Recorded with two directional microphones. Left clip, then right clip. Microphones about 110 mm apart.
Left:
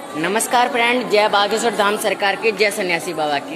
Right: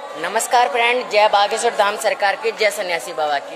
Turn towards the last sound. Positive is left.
turn(degrees=-40)  # may be behind; listen again after turning